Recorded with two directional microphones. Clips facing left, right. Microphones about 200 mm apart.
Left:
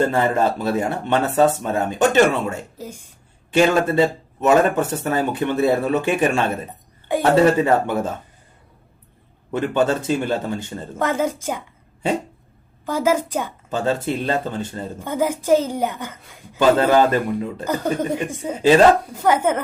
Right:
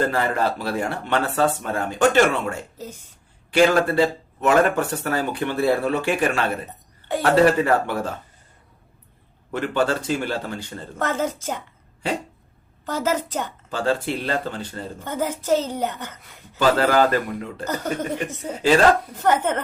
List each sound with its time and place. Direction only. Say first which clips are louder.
0.1 s a woman's voice: left 4 dB; 20° left (ahead or behind)
3.5 s speech: left 1 dB; 20° left (ahead or behind)
9.5 s a woman's voice: left 3 dB; 20° left (ahead or behind)
12.8 s a woman's voice: left 4 dB; 10° left (ahead or behind)
13.7 s speech: left 1 dB; 20° left (ahead or behind)
14.9 s a woman's voice: left 5 dB; 10° left (ahead or behind)